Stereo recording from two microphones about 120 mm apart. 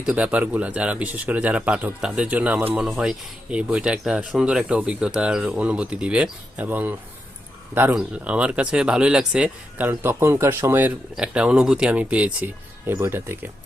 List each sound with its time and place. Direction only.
0.0 s speech: 10° right (ahead or behind)
7.9 s speech: 10° right (ahead or behind)